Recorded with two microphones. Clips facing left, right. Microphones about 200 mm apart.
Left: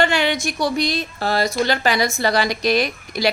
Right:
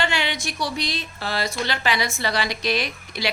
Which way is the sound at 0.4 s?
45° left (ahead or behind).